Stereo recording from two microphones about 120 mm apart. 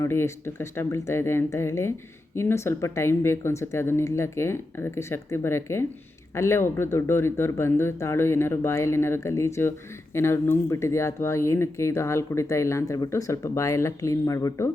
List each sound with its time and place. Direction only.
0.0 s speech: 20° left (ahead or behind)